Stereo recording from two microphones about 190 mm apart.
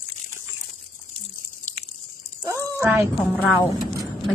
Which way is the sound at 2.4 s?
15° right (ahead or behind).